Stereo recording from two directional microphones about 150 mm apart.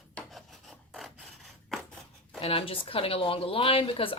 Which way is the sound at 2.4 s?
40° left (ahead or behind).